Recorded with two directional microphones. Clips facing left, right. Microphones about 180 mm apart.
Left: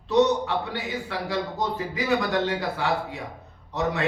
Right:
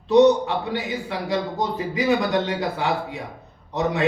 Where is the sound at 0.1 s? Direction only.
20° right (ahead or behind).